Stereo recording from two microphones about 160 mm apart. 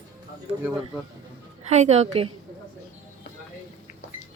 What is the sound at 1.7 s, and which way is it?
Speech, 45° right (ahead or behind).